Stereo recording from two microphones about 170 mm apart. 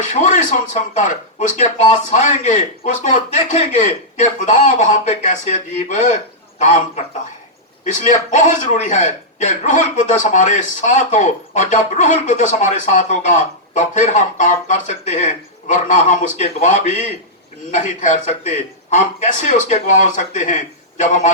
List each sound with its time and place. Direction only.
0.0 s a man's voice: 45° left (ahead or behind)
8.0 s a man's voice: 45° left (ahead or behind)